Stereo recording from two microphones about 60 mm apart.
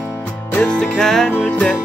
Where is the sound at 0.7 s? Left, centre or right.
Centre.